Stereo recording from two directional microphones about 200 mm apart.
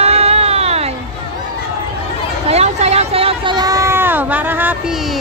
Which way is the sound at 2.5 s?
30° right (ahead or behind).